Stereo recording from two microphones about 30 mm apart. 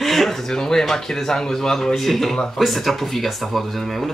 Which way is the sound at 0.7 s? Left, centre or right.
Centre.